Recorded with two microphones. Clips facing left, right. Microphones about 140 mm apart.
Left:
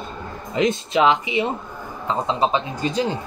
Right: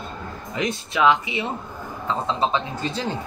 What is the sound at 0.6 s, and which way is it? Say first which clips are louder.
Speech: left 3 dB; 20° left (ahead or behind).